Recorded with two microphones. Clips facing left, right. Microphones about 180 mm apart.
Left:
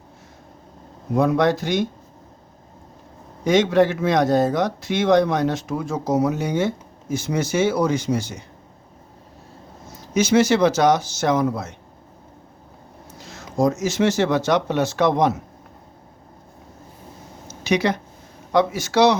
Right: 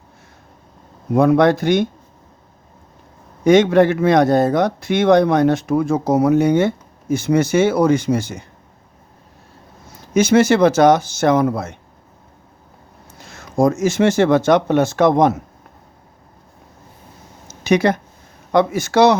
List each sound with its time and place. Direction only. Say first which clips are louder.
1.1 s speech: right 5 dB; 60° right (ahead or behind)
3.4 s speech: right 5 dB; 55° right (ahead or behind)
10.2 s speech: right 4 dB; 55° right (ahead or behind)
13.1 s speech: right 4 dB; 55° right (ahead or behind)
17.6 s speech: right 5 dB; 50° right (ahead or behind)